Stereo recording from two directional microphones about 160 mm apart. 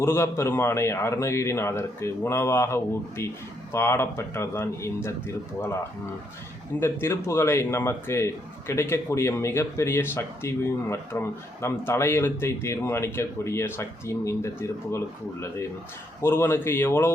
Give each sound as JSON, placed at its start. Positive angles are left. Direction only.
{"t": 0.0, "sound": "a man's voice", "side_deg": 15}
{"t": 6.7, "sound": "a man's voice", "side_deg": 15}